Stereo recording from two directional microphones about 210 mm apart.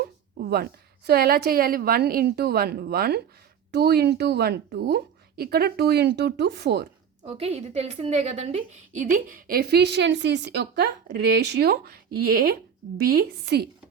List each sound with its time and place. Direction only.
0.0 s a woman's voice: 50° right (ahead or behind)
7.3 s a woman's voice: 30° right (ahead or behind); by 13.7 s 50° right (ahead or behind)